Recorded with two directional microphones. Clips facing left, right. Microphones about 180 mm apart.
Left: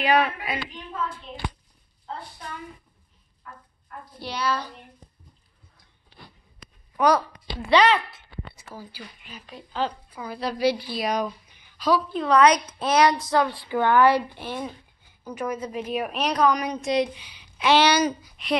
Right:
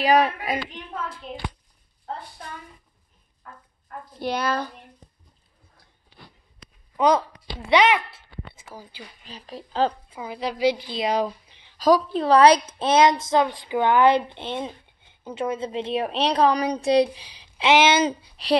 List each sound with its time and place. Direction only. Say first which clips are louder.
0.0 s a woman's voice: right 3 dB; 40° right (ahead or behind)
4.2 s a woman's voice: right 3 dB; 50° right (ahead or behind)
7.0 s speech: right 1 dB; 20° right (ahead or behind)
9.2 s a woman's voice: right 4 dB; 35° right (ahead or behind)
17.6 s a woman's voice: right 1 dB; 20° right (ahead or behind)